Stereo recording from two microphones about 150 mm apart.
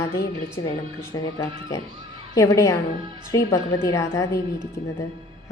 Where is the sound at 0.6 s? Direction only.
25° left (ahead or behind).